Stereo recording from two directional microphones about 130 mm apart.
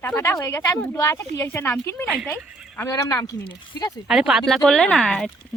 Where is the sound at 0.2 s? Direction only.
20° left (ahead or behind).